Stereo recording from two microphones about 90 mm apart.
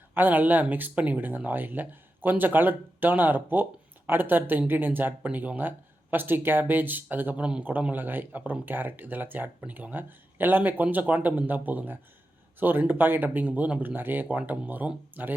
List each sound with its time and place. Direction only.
0.1 s speech: 20° right (ahead or behind)